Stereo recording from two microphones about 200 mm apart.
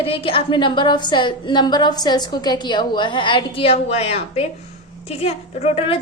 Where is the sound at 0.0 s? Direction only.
25° left (ahead or behind).